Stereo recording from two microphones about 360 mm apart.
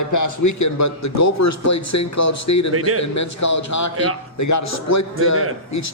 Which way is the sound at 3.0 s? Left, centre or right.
Left.